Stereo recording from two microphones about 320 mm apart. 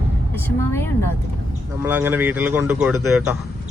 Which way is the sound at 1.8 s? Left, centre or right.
Centre.